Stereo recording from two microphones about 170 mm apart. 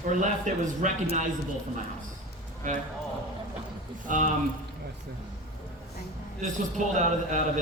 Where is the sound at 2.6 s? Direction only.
50° right (ahead or behind).